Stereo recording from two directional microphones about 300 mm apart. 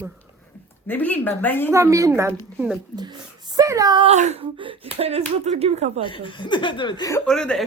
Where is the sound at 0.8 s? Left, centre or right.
Centre.